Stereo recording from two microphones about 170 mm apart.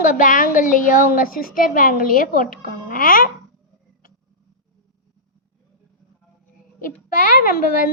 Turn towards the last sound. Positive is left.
turn(degrees=55)  # may be behind; listen again after turning